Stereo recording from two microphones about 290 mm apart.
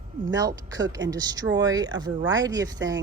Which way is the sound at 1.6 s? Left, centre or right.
Centre.